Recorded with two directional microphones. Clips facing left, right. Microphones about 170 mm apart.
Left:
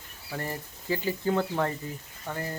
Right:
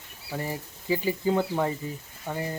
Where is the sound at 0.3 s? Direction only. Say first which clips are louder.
Right 2 dB; 10° right (ahead or behind).